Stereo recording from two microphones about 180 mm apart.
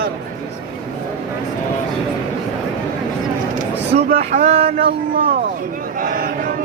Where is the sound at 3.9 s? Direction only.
45° right (ahead or behind).